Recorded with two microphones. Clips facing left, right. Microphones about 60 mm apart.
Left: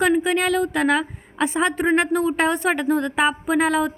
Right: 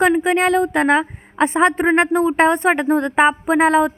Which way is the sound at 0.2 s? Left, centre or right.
Right.